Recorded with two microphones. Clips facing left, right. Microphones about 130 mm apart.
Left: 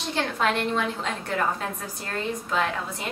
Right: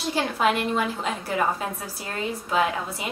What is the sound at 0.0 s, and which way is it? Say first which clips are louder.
A woman's voice: right 2 dB; 5° right (ahead or behind).